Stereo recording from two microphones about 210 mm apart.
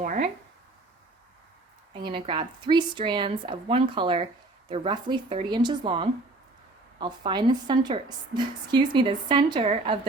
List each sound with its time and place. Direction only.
0.0 s speech: 40° right (ahead or behind)
2.0 s a woman's voice: 25° right (ahead or behind)